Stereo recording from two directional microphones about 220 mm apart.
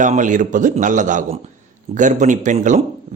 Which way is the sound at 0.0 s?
35° right (ahead or behind).